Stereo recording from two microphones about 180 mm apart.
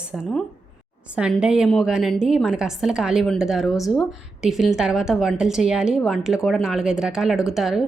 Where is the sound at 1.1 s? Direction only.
5° right (ahead or behind).